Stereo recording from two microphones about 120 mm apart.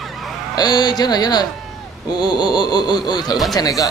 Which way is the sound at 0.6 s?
35° left (ahead or behind).